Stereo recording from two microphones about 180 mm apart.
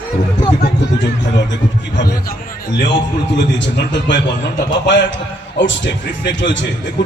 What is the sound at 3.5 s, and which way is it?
A man's voice, 80° left.